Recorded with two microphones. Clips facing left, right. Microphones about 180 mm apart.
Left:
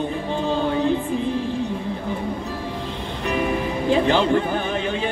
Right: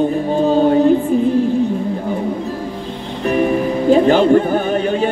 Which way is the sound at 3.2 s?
45° right (ahead or behind).